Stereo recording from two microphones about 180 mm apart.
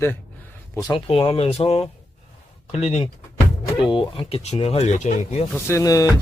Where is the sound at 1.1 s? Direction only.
30° left (ahead or behind).